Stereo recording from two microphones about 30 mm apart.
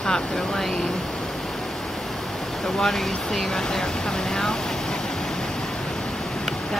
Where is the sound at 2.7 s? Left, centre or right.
Centre.